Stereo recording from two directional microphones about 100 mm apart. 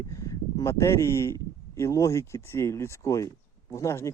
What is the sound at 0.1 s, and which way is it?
Speech, 35° left (ahead or behind).